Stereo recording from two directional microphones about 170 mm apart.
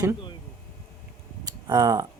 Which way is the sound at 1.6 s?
20° right (ahead or behind).